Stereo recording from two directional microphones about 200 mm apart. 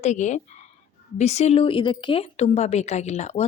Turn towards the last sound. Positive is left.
turn(degrees=35)  # may be behind; listen again after turning